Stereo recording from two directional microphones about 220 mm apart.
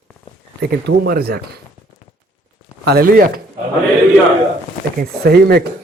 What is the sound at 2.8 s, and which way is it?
Speech, 45° right (ahead or behind).